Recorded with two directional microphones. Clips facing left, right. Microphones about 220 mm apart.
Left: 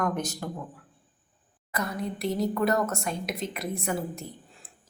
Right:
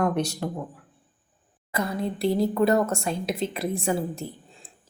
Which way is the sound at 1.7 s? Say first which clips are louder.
Right 4 dB; 30° right (ahead or behind).